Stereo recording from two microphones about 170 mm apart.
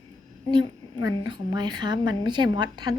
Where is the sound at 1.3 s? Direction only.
25° right (ahead or behind).